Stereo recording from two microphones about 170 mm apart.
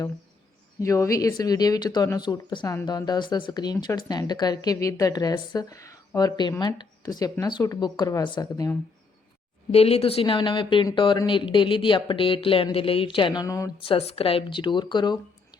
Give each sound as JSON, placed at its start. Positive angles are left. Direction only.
{"t": 0.8, "sound": "speech", "side_deg": 20}
{"t": 9.7, "sound": "speech", "side_deg": 35}
{"t": 13.8, "sound": "speech", "side_deg": 35}